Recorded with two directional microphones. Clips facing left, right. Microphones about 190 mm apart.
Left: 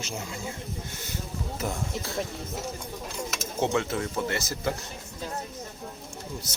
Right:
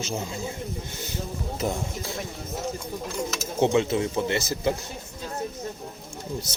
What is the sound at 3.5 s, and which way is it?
Speech, 20° right (ahead or behind).